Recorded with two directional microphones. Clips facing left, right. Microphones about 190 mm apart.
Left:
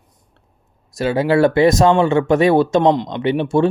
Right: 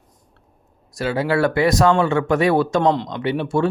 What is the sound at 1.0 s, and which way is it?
A man's voice, 20° left (ahead or behind).